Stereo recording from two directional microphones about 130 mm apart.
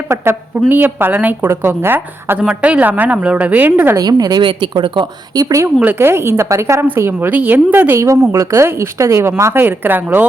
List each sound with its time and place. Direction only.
0.1 s a woman's voice: 20° right (ahead or behind)
3.9 s a woman's voice: 30° right (ahead or behind); by 10.2 s 15° right (ahead or behind)